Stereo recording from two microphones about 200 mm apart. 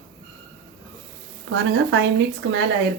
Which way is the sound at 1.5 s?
70° right (ahead or behind).